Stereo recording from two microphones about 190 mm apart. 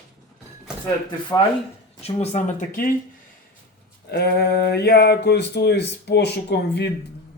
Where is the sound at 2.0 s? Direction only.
35° left (ahead or behind).